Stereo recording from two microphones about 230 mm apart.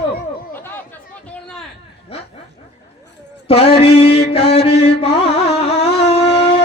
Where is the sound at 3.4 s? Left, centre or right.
Left.